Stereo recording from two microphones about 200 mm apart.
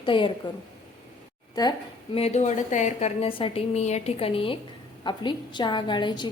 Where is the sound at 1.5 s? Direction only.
20° left (ahead or behind).